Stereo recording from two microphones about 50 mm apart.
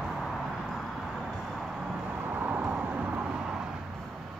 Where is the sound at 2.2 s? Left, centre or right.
Right.